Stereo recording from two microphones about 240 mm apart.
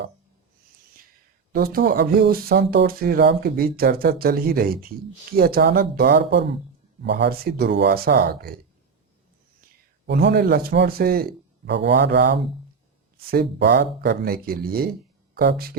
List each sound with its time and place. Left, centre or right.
1.5 s a man's voice: right
10.1 s a man's voice: right